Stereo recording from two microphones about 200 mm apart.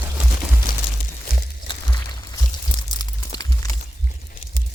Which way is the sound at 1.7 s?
20° left (ahead or behind).